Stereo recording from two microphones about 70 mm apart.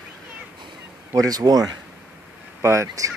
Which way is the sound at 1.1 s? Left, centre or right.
Right.